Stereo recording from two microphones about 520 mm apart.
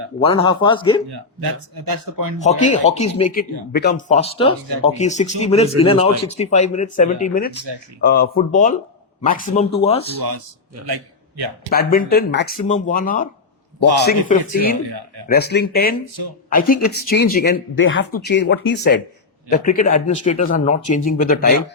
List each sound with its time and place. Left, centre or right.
0.2 s speech: centre
1.1 s speech: right
2.4 s speech: centre
10.8 s a sound: right
11.7 s speech: centre
14.8 s speech: right
15.3 s speech: centre